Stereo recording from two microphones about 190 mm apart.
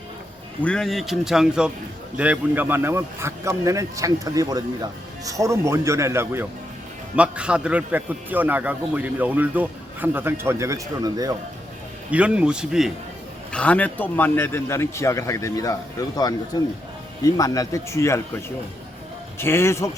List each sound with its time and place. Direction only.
0.6 s a man's voice: 5° left (ahead or behind); by 11.3 s 20° right (ahead or behind)
12.1 s a man's voice: 5° right (ahead or behind); by 19.9 s 15° left (ahead or behind)